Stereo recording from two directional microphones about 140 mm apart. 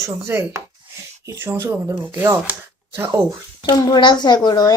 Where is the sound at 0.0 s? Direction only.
20° right (ahead or behind).